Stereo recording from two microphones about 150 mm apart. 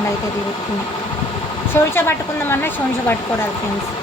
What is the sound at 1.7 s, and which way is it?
Speech, 15° left (ahead or behind).